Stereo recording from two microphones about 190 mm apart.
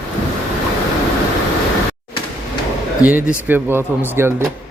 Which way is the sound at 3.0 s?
10° right (ahead or behind).